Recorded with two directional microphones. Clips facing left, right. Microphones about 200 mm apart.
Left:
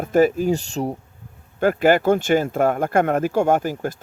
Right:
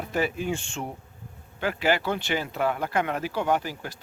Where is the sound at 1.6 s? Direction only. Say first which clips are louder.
Left 9 dB; 50° left (ahead or behind).